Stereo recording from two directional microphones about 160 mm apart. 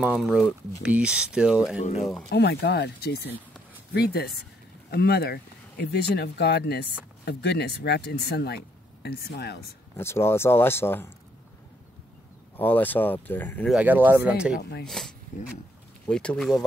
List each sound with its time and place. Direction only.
0.0 s speech: 5° right (ahead or behind)
2.2 s speech: 90° left
3.9 s speech: 80° left
9.9 s speech: 15° left (ahead or behind)
12.5 s speech: 10° left (ahead or behind)
13.7 s speech: 10° right (ahead or behind)
14.6 s speech: 90° left
14.9 s speech: centre (ahead or behind)